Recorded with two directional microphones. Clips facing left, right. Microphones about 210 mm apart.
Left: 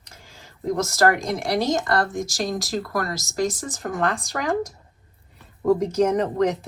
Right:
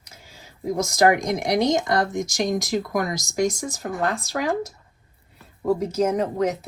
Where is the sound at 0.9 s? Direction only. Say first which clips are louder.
Right 3 dB; 15° right (ahead or behind).